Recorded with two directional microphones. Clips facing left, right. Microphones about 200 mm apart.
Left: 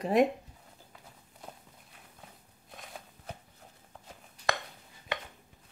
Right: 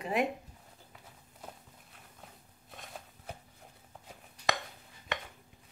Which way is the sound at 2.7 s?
Centre (ahead or behind).